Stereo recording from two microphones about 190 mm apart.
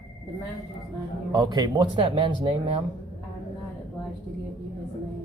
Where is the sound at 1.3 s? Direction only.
20° right (ahead or behind).